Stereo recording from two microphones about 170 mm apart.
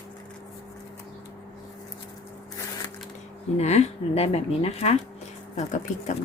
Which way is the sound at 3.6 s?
40° left (ahead or behind).